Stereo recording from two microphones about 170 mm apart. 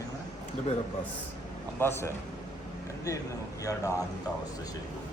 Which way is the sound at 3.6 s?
20° left (ahead or behind).